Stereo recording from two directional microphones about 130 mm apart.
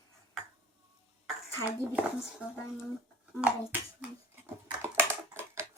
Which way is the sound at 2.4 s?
10° right (ahead or behind).